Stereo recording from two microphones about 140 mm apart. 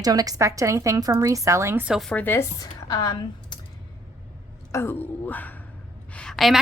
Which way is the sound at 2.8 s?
30° left (ahead or behind).